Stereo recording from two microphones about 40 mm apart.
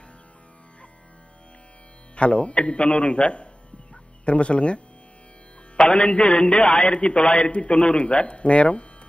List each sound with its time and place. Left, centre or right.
2.1 s a man's voice: left
3.9 s music: left
5.8 s a man's voice: left